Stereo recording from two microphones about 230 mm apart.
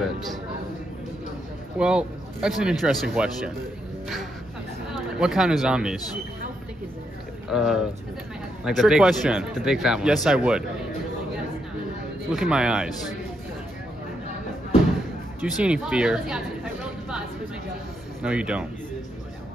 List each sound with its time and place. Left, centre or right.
1.8 s speech: centre
5.2 s speech: centre
7.4 s speech: centre
12.3 s speech: centre
15.5 s speech: centre
18.2 s speech: centre